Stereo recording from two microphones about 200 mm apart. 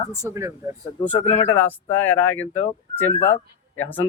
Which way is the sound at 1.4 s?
10° left (ahead or behind).